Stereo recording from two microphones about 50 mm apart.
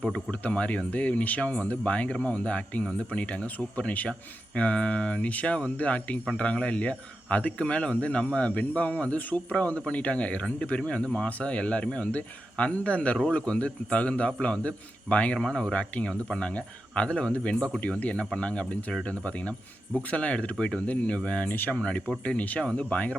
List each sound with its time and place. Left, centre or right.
0.4 s speech: left
15.4 s speech: centre
15.7 s speech: left
21.5 s speech: left
21.8 s speech: left